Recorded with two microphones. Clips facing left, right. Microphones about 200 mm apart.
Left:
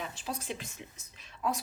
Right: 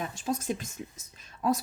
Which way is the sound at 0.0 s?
45° right (ahead or behind).